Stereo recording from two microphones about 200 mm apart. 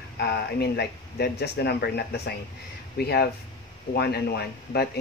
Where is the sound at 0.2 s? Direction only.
55° left (ahead or behind).